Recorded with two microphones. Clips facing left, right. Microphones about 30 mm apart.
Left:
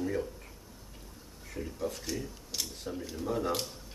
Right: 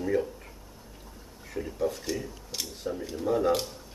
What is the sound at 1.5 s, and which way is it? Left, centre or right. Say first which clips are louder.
Speech: right 6 dB; centre.